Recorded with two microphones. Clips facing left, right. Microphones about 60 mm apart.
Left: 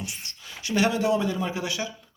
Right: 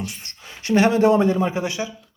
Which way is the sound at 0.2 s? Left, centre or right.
Right.